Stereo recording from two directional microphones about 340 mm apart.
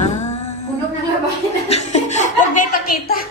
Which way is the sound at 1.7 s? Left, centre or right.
Centre.